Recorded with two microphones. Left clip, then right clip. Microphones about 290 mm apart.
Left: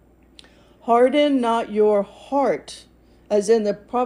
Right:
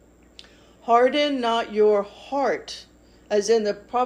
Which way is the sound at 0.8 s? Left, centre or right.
Left.